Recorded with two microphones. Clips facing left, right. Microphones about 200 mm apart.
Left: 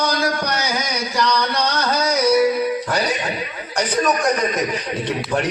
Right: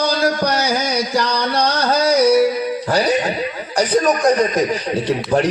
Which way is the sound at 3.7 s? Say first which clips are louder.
Right 4 dB; 35° right (ahead or behind).